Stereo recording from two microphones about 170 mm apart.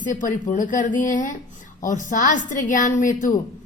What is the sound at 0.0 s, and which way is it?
A woman's voice, 50° left (ahead or behind).